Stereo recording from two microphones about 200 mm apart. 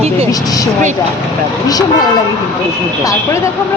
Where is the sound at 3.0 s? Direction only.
15° left (ahead or behind).